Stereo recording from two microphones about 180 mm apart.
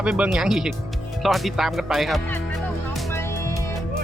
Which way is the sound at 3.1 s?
15° left (ahead or behind).